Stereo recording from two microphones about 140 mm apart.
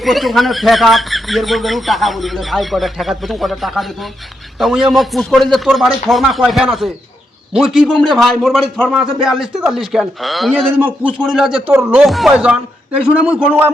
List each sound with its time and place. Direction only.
0.0 s speech: centre (ahead or behind)
10.8 s speech: 10° right (ahead or behind)
11.7 s speech: 15° right (ahead or behind)
12.0 s speech: centre (ahead or behind)